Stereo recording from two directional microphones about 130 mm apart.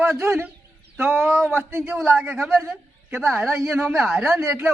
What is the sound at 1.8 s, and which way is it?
Speech, 5° right (ahead or behind).